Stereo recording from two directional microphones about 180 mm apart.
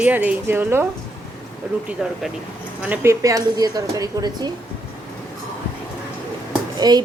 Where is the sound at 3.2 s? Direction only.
20° right (ahead or behind).